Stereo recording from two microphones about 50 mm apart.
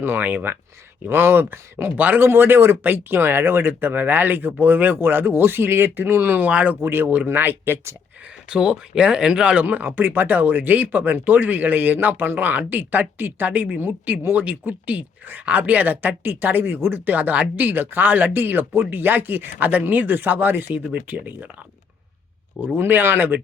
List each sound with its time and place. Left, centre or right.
0.0 s speech: right
2.0 s speech: right
6.3 s speech: right
6.8 s speech: right
8.4 s speech: centre
9.6 s speech: right
20.7 s speech: right
22.8 s speech: right